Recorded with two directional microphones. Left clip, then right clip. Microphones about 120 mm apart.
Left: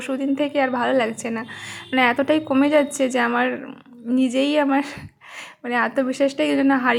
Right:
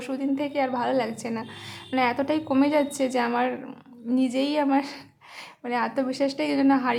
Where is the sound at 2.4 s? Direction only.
15° left (ahead or behind).